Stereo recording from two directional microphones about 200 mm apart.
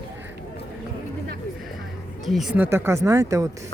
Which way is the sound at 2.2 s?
Centre (ahead or behind).